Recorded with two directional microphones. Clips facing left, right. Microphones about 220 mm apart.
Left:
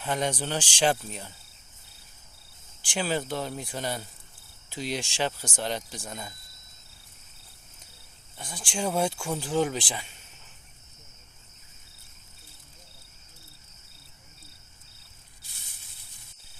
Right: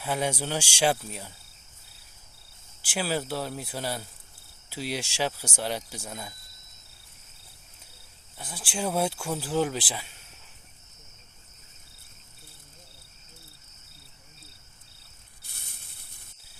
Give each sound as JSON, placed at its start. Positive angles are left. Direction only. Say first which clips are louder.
{"t": 0.0, "sound": "speech", "louder": "even", "side_deg": -5}
{"t": 2.8, "sound": "speech", "louder": "even", "side_deg": -5}
{"t": 8.4, "sound": "speech", "louder": "even", "side_deg": -5}
{"t": 15.4, "sound": "snake", "louder": "right 4 dB", "side_deg": -55}